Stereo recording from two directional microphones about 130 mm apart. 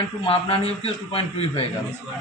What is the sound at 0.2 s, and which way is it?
A man's voice, 45° left (ahead or behind).